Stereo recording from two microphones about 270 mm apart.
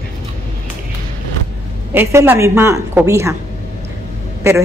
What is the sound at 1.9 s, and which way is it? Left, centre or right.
A woman's voice, centre.